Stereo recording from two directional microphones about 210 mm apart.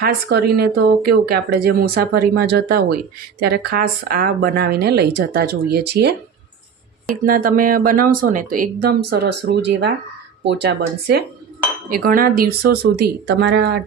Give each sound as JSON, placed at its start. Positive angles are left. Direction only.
{"t": 0.0, "sound": "speech", "side_deg": -50}
{"t": 7.3, "sound": "speech", "side_deg": -40}